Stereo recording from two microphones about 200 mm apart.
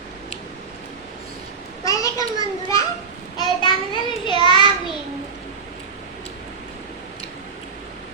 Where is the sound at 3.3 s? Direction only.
25° left (ahead or behind).